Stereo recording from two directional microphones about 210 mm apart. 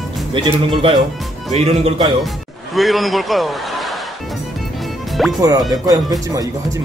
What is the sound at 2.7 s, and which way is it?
A man's voice, centre (ahead or behind).